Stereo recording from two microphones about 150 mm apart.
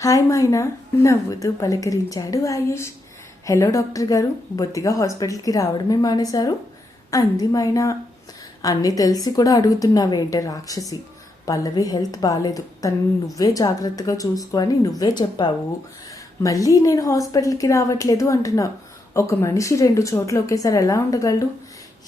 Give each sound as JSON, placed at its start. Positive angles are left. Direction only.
{"t": 0.0, "sound": "a woman's voice", "side_deg": 20}